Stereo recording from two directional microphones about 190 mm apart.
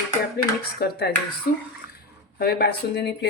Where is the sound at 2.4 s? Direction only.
60° left (ahead or behind).